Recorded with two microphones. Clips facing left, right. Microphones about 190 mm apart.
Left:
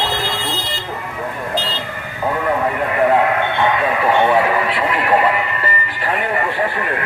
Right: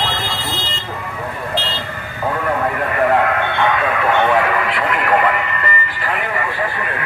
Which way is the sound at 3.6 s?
20° left (ahead or behind).